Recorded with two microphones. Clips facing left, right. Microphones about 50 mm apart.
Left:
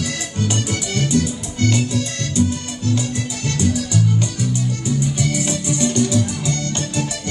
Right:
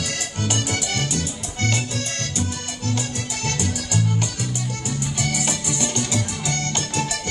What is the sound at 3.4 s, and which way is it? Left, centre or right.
Music, right.